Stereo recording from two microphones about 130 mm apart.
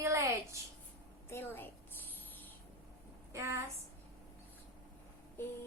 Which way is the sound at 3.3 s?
25° right (ahead or behind).